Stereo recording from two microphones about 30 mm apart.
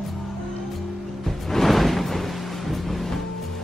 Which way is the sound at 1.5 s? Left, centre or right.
Centre.